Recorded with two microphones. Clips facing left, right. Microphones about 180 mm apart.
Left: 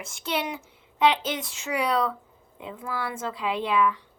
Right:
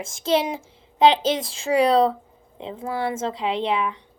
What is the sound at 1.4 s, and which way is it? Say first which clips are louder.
A woman's voice: right 9 dB; 30° right (ahead or behind).